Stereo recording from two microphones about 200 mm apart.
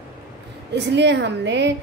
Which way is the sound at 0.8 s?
60° right (ahead or behind).